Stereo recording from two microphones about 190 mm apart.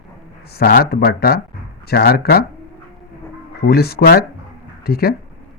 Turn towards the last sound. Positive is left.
turn(degrees=55)  # may be behind; listen again after turning